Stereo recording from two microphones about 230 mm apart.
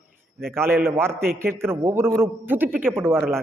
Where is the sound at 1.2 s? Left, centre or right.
Right.